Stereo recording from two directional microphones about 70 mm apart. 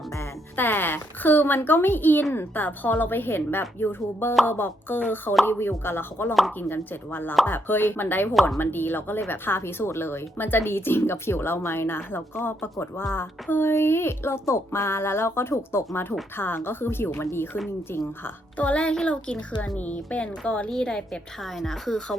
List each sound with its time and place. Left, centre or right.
0.5 s speech: left
18.5 s a child's voice: centre